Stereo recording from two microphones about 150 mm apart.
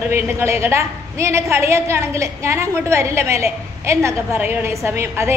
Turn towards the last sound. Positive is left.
turn(degrees=-15)  # may be behind; listen again after turning